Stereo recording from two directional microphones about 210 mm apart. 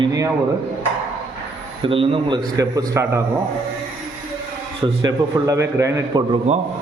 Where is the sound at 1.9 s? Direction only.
25° right (ahead or behind).